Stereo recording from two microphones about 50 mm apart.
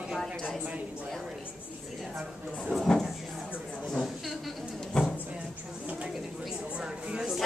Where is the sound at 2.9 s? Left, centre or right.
Centre.